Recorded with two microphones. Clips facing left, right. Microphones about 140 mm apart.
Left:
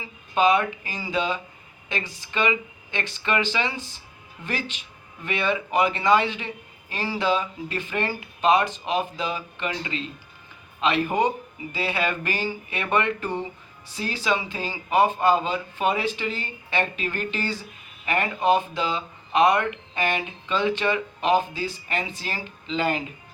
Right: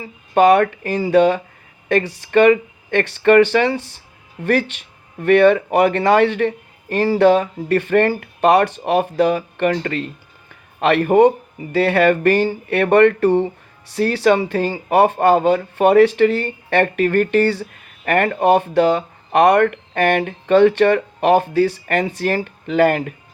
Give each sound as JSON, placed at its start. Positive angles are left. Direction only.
{"t": 0.0, "sound": "speech", "side_deg": -65}